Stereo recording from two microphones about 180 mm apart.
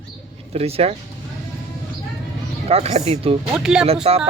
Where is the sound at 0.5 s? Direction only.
35° right (ahead or behind).